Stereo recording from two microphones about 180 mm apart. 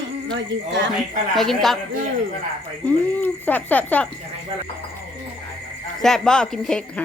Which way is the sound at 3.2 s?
10° left (ahead or behind).